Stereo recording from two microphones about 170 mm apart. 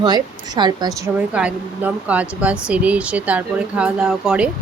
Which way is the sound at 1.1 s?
5° right (ahead or behind).